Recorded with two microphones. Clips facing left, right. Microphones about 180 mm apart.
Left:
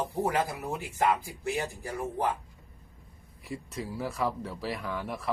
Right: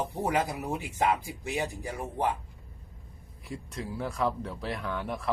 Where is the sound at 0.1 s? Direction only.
15° right (ahead or behind).